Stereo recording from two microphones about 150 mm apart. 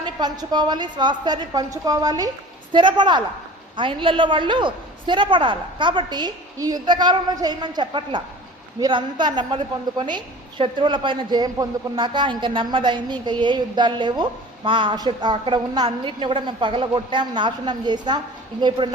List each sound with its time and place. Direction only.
0.0 s a woman's voice: 30° right (ahead or behind)